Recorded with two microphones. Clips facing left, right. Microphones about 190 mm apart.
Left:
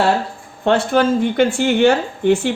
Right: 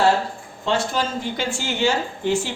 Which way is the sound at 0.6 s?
60° left (ahead or behind).